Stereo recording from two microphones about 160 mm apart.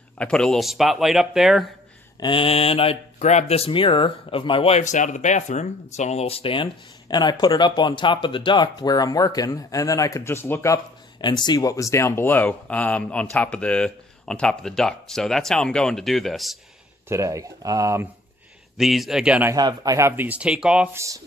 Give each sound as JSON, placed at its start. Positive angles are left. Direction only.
{"t": 0.2, "sound": "speech", "side_deg": 5}
{"t": 2.1, "sound": "speech", "side_deg": 30}
{"t": 11.1, "sound": "speech", "side_deg": 30}
{"t": 17.1, "sound": "speech", "side_deg": -20}
{"t": 18.8, "sound": "speech", "side_deg": 0}
{"t": 19.5, "sound": "speech", "side_deg": -25}